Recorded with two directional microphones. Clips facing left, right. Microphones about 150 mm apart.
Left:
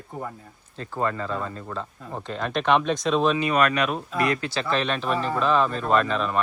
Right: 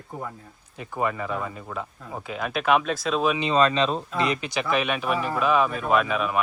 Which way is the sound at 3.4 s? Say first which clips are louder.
Right 1 dB; 25° right (ahead or behind).